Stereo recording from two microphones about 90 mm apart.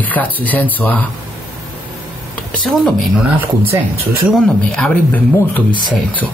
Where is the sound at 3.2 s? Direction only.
20° right (ahead or behind).